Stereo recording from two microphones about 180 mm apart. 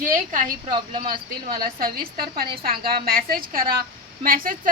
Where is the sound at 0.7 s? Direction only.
25° right (ahead or behind).